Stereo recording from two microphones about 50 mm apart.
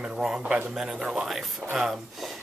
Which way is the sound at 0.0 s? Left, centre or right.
Centre.